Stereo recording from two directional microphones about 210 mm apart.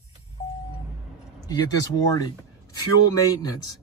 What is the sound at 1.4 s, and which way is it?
Speech, 20° left (ahead or behind).